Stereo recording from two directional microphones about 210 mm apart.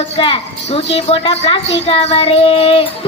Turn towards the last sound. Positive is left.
turn(degrees=25)  # may be behind; listen again after turning